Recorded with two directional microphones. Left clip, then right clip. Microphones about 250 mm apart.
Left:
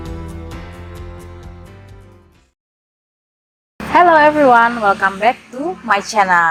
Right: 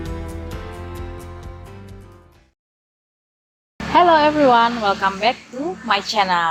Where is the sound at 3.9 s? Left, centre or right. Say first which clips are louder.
Left 4 dB; left.